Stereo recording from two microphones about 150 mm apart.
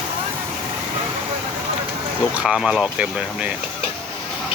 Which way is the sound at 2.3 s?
5° right (ahead or behind).